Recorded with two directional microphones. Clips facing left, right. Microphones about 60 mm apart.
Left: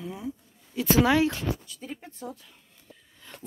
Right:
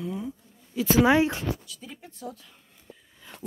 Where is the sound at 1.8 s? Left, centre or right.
Left.